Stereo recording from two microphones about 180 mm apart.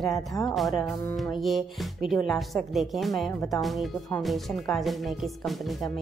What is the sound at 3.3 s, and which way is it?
Speech, 15° left (ahead or behind).